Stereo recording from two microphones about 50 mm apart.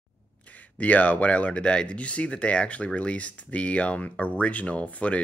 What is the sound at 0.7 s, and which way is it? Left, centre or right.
Speech, left.